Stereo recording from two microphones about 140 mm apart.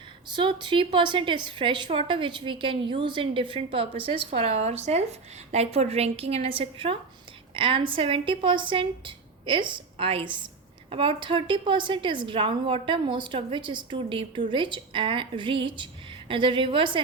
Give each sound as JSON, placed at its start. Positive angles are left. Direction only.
{"t": 0.3, "sound": "a woman's voice", "side_deg": -35}